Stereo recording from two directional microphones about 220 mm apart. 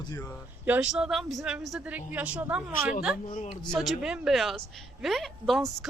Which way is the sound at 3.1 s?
35° left (ahead or behind).